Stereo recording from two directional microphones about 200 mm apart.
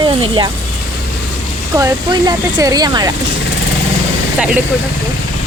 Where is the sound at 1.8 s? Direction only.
20° right (ahead or behind).